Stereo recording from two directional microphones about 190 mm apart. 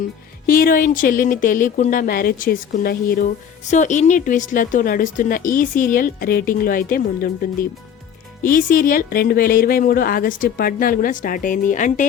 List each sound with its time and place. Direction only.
0.4 s speech: 45° left (ahead or behind)
3.7 s speech: 40° left (ahead or behind)